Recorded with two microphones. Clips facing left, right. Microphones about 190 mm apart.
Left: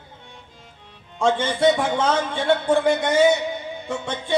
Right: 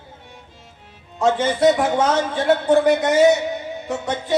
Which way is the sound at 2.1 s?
5° right (ahead or behind).